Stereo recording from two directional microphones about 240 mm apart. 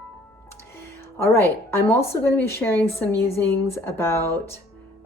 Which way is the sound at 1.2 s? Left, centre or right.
Centre.